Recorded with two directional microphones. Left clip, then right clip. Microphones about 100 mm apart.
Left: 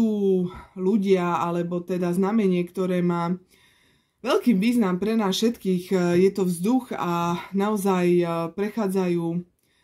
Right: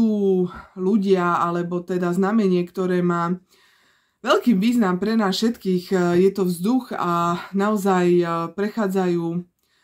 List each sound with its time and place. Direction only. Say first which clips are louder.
0.1 s speech: right 3 dB; 30° left (ahead or behind)